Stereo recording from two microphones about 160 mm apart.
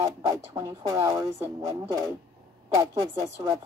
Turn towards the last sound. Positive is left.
turn(degrees=-25)  # may be behind; listen again after turning